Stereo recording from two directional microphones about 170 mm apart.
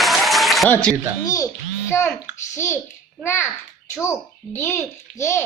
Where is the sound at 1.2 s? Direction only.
20° left (ahead or behind).